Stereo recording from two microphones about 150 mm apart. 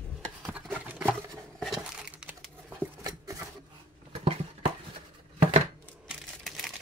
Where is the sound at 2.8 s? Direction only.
20° right (ahead or behind).